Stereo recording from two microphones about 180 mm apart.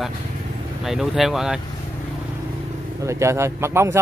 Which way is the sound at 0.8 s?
Centre (ahead or behind).